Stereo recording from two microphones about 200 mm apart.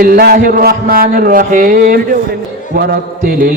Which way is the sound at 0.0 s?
45° right (ahead or behind).